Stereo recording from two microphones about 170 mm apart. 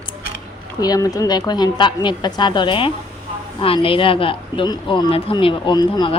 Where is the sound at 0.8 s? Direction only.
20° left (ahead or behind).